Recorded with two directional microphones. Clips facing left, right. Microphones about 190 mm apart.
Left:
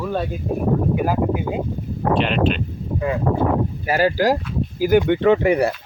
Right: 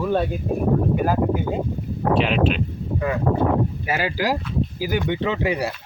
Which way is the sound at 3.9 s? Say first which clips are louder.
Left 8 dB; 45° left (ahead or behind).